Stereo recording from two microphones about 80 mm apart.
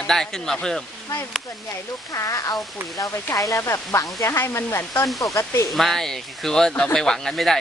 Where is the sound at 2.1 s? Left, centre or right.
Left.